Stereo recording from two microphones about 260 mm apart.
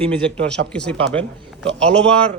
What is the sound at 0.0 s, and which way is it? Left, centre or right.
Speech, centre.